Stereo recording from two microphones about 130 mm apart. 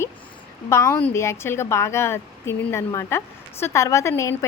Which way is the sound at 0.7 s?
20° left (ahead or behind).